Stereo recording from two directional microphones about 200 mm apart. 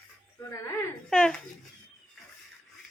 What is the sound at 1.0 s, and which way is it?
Speech, 5° left (ahead or behind).